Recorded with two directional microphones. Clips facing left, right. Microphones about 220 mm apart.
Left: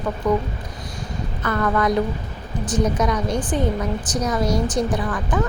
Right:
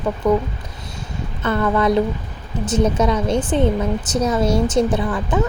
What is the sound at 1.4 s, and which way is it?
A woman's voice, 25° right (ahead or behind).